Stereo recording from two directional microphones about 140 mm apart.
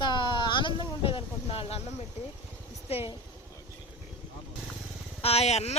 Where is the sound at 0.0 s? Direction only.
35° left (ahead or behind).